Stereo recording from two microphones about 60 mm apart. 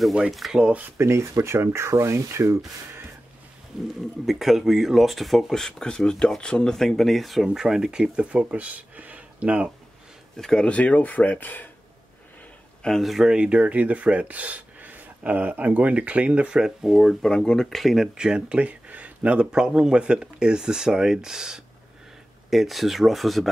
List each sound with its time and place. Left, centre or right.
0.3 s speech: centre
0.6 s speech: centre
0.9 s speech: right
4.3 s speech: centre; by 9.7 s right
10.3 s speech: centre
10.7 s speech: left
12.8 s speech: centre
17.1 s speech: centre